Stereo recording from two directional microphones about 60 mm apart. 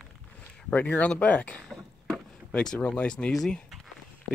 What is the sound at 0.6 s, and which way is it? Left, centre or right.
Speech, left.